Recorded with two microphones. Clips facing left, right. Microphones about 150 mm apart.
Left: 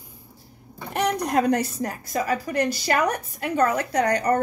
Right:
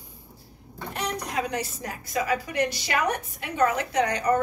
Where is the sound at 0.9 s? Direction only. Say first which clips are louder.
Left 8 dB; 55° left (ahead or behind).